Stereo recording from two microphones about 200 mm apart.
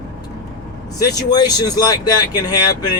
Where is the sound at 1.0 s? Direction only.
20° left (ahead or behind).